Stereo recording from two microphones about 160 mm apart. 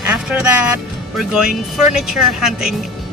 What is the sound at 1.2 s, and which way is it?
Speech, 5° right (ahead or behind).